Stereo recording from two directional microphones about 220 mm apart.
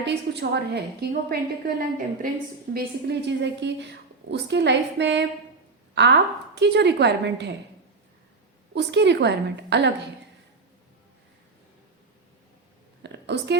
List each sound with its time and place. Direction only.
0.0 s a woman's voice: 50° right (ahead or behind)
8.7 s a woman's voice: 50° right (ahead or behind)
13.0 s a sound: 50° right (ahead or behind)